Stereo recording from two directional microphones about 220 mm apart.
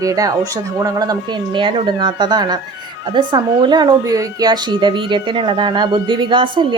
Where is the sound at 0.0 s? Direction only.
15° right (ahead or behind).